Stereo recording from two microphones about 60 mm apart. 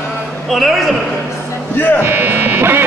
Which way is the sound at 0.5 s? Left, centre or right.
Centre.